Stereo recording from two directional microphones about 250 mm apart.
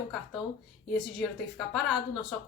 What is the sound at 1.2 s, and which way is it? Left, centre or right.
Speech, centre.